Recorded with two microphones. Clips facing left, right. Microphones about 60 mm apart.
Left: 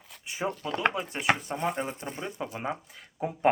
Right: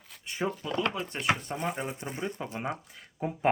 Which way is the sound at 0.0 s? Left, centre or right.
Centre.